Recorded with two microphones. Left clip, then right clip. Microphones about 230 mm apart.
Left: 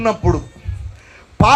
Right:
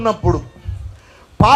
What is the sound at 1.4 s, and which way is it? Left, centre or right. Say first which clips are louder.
Speech: right 1 dB; centre.